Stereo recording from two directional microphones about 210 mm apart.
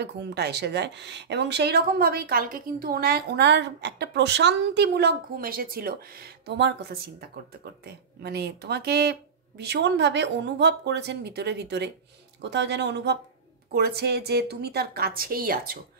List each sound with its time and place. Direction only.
0.0 s speech: 50° right (ahead or behind)